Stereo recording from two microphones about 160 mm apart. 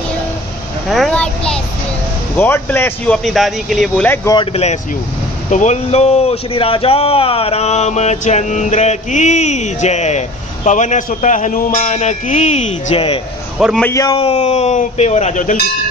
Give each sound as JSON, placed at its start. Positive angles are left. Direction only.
{"t": 0.8, "sound": "a child's voice", "side_deg": 0}
{"t": 3.3, "sound": "a man's voice", "side_deg": 0}
{"t": 4.4, "sound": "speech", "side_deg": 40}
{"t": 13.6, "sound": "a man's voice", "side_deg": -5}
{"t": 13.8, "sound": "a man's voice", "side_deg": 20}
{"t": 14.1, "sound": "speech", "side_deg": 40}